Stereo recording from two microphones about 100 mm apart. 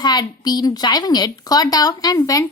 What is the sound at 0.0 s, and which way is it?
A woman's voice, 45° left (ahead or behind).